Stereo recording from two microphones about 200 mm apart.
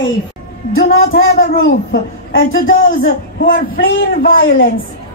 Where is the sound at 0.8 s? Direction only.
50° left (ahead or behind).